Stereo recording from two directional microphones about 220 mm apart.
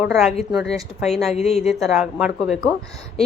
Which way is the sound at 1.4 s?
30° left (ahead or behind).